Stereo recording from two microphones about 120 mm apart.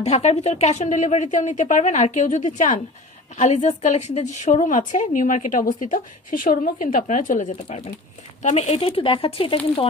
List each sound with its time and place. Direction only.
0.0 s a woman's voice: 65° left (ahead or behind); by 2.8 s 90° left
3.3 s a woman's voice: 75° left (ahead or behind); by 5.9 s 90° left
7.1 s a woman's voice: 90° left; by 9.8 s 50° left (ahead or behind)